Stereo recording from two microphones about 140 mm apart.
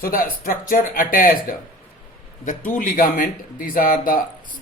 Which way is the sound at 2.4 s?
70° left (ahead or behind).